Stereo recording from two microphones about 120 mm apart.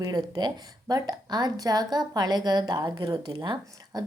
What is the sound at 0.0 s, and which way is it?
Speech, 35° right (ahead or behind).